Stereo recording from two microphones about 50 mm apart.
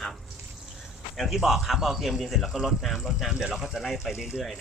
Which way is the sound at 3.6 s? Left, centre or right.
Centre.